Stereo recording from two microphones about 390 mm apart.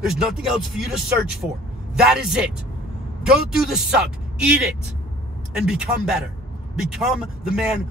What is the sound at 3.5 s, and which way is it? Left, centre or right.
Speech, centre.